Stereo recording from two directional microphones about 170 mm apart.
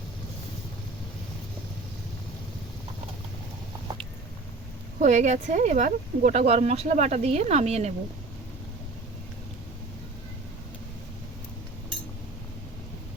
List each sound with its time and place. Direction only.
4.9 s speech: 45° right (ahead or behind)